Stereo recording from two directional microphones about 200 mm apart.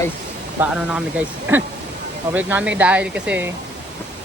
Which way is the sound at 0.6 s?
5° right (ahead or behind).